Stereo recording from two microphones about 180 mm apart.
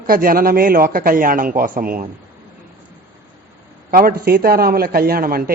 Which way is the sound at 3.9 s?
55° right (ahead or behind).